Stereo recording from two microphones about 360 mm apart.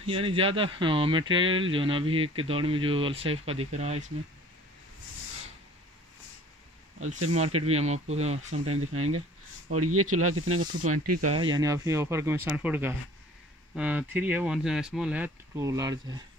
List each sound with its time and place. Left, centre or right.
0.0 s speech: centre
7.0 s speech: centre
8.7 s speech: right
11.3 s speech: centre